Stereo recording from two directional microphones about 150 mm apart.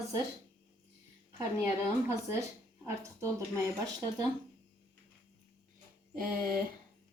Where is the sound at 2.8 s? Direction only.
20° right (ahead or behind).